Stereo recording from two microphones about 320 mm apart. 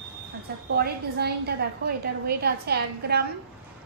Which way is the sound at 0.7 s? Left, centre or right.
Right.